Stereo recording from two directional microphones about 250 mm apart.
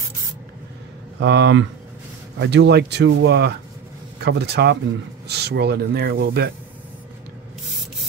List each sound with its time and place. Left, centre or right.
1.2 s speech: right